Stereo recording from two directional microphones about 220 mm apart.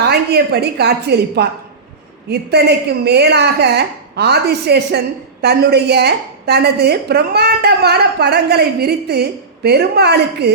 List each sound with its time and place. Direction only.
0.0 s a woman's voice: 45° right (ahead or behind)